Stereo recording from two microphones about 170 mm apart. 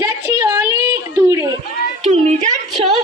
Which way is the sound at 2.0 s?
45° right (ahead or behind).